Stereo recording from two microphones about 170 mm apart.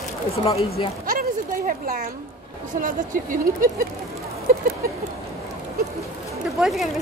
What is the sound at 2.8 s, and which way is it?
Speech, 50° right (ahead or behind).